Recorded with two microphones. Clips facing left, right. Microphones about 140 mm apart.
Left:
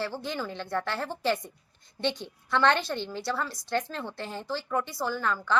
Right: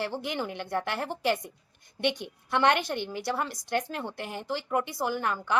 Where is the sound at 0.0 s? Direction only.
15° right (ahead or behind).